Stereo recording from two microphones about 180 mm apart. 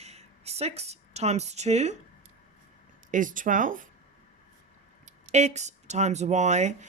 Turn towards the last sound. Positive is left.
turn(degrees=-40)  # may be behind; listen again after turning